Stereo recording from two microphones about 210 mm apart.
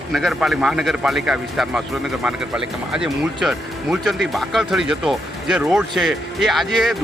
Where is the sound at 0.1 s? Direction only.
Centre (ahead or behind).